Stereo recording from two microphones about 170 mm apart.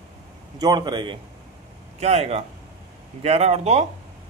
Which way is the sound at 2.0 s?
40° right (ahead or behind).